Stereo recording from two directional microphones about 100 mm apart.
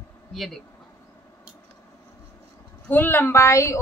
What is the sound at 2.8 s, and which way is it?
Speech, 20° left (ahead or behind).